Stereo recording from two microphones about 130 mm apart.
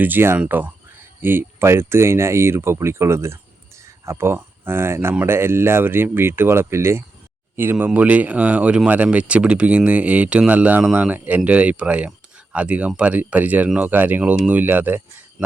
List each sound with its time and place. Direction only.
0.0 s speech: 15° right (ahead or behind)